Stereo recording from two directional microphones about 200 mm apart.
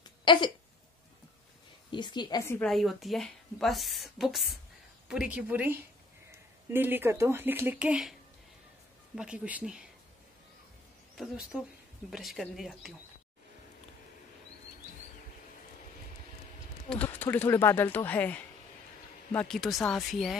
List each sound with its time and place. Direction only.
0.0 s a sound: 25° left (ahead or behind)
1.9 s a woman's voice: 25° left (ahead or behind)
2.6 s speech: centre (ahead or behind)
11.1 s speech: centre (ahead or behind)
16.9 s speech: 10° left (ahead or behind)